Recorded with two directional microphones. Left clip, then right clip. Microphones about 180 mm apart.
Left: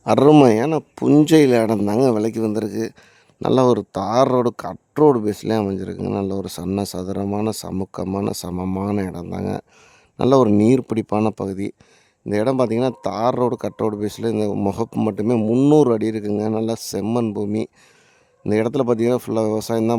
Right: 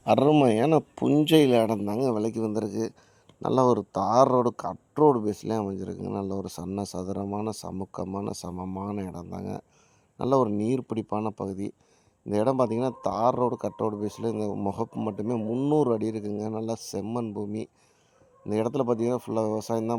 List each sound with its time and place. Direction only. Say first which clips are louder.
0.0 s speech: left 8 dB; 45° left (ahead or behind)
1.0 s speech: left 9 dB; 40° left (ahead or behind)
8.6 s speech: left 11 dB; 55° left (ahead or behind)
14.8 s speech: left 10 dB; 55° left (ahead or behind)
15.1 s speech: left 10 dB; 40° left (ahead or behind)
15.4 s speech: left 11 dB; 55° left (ahead or behind)
15.8 s speech: left 8 dB; 40° left (ahead or behind)